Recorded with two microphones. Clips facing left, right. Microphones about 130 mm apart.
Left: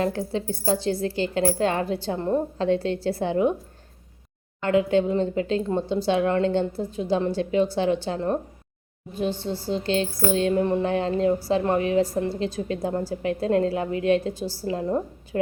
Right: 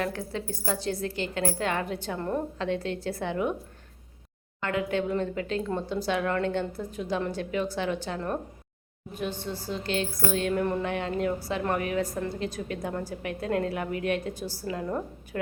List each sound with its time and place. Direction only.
0.0 s a woman's voice: 30° left (ahead or behind)
4.6 s speech: 30° left (ahead or behind)